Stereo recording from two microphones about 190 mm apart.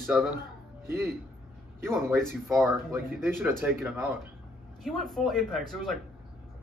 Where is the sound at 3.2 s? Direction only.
10° right (ahead or behind).